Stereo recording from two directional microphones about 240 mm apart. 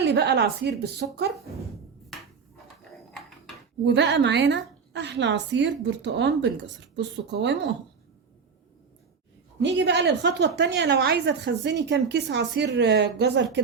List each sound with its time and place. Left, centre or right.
0.0 s a woman's voice: right
3.1 s a sound: centre
3.8 s a woman's voice: right
9.6 s a woman's voice: right